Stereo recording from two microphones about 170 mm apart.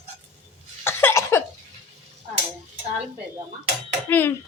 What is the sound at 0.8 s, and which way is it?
Cough, 15° left (ahead or behind).